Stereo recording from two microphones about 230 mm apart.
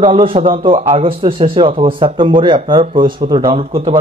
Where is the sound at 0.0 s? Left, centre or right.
Right.